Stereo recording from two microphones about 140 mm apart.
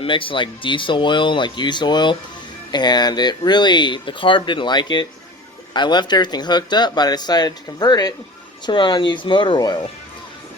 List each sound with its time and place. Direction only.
0.0 s speech: 40° left (ahead or behind)